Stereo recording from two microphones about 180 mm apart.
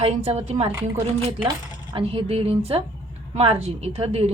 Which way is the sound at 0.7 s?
15° right (ahead or behind).